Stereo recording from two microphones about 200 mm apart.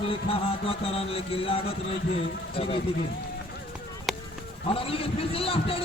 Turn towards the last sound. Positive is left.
turn(degrees=30)  # may be behind; listen again after turning